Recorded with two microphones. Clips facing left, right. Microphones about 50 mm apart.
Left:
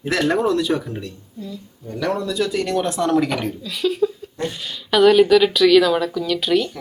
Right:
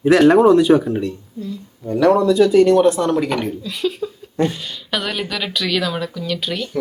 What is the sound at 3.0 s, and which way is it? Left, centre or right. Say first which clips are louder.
Speech: even; centre.